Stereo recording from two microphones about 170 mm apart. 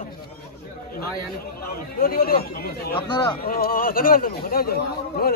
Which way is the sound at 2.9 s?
25° left (ahead or behind).